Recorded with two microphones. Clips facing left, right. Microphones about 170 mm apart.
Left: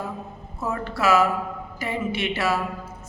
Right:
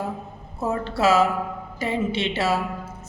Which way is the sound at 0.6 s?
25° right (ahead or behind).